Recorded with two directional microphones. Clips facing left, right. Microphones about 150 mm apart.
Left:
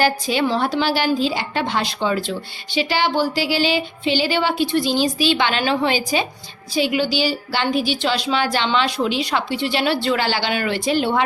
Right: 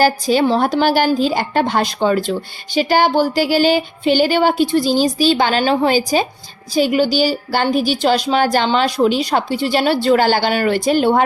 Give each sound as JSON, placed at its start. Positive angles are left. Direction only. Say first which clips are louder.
{"t": 0.0, "sound": "speech", "louder": "right 5 dB", "side_deg": -40}